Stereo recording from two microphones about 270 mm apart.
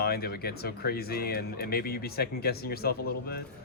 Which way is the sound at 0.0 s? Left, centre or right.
Left.